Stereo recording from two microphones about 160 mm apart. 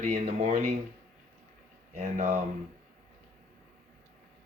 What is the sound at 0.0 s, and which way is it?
Speech, 45° right (ahead or behind).